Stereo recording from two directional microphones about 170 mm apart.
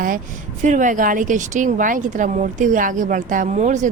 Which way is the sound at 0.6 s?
45° right (ahead or behind).